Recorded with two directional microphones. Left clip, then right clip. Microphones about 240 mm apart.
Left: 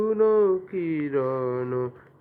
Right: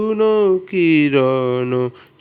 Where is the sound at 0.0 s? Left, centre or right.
Right.